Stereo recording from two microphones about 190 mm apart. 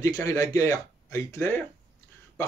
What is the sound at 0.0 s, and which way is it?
Speech, 15° left (ahead or behind).